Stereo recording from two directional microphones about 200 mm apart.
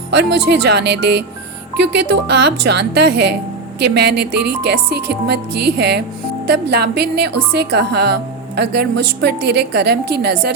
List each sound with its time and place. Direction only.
0.1 s a woman's voice: 60° right (ahead or behind)